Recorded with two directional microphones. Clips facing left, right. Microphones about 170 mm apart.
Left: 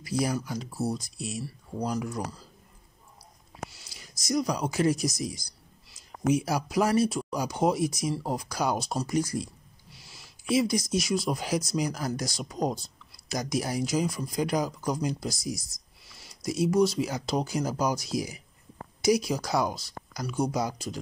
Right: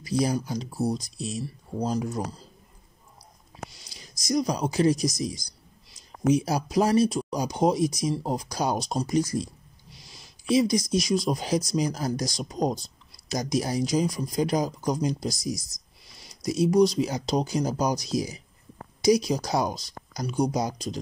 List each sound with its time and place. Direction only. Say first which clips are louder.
0.0 s speech: right 3 dB; 20° right (ahead or behind)
3.8 s speech: right 2 dB; 20° right (ahead or behind)
10.2 s a sound: right 3 dB; 20° right (ahead or behind)
11.0 s speech: right 3 dB; 20° right (ahead or behind)